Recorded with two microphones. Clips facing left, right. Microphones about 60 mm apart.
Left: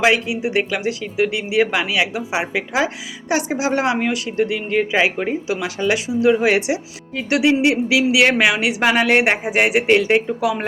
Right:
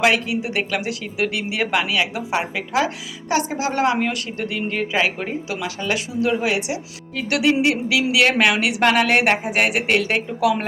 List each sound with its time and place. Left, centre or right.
0.0 s speech: centre